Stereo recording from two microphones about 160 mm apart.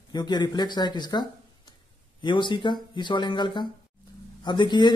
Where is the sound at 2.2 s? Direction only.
30° left (ahead or behind).